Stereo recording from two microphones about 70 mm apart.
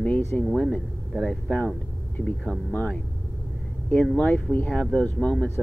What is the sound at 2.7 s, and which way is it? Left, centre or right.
Speech, centre.